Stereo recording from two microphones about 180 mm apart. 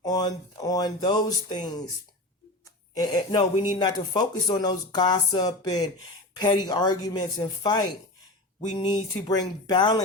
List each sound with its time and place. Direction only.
0.0 s speech: 20° left (ahead or behind)
2.9 s speech: 25° left (ahead or behind)